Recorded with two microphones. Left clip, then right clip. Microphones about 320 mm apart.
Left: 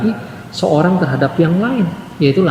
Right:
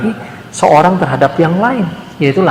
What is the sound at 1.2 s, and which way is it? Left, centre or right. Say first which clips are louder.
Speech: right 6 dB; right.